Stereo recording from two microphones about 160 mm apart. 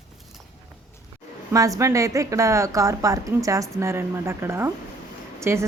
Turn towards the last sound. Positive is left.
turn(degrees=-15)  # may be behind; listen again after turning